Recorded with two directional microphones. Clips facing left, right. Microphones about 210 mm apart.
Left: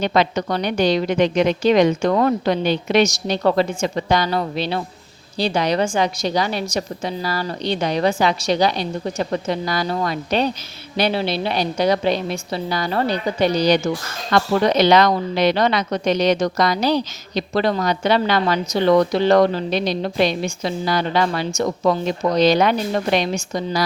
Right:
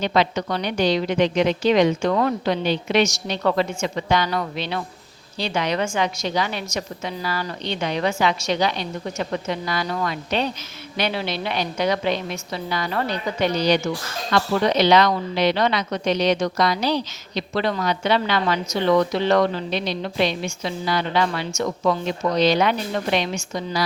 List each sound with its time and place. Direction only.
0.0 s a woman's voice: 45° left (ahead or behind)